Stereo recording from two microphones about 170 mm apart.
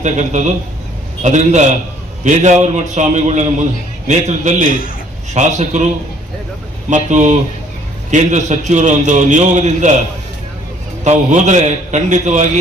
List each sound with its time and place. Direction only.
0.0 s a man's voice: 45° right (ahead or behind)
6.9 s a man's voice: 45° right (ahead or behind)
11.0 s a man's voice: 45° right (ahead or behind)